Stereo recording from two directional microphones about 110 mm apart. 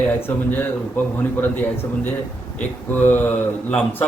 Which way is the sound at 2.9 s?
15° left (ahead or behind).